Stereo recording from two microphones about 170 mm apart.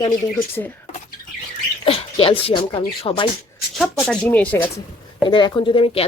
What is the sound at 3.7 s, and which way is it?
Speech, 5° left (ahead or behind).